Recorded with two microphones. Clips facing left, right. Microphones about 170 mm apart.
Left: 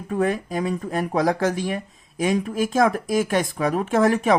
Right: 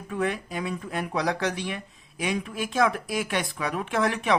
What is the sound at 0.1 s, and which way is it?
Speech, 45° left (ahead or behind).